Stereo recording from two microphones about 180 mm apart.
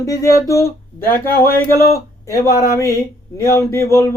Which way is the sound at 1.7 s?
55° left (ahead or behind).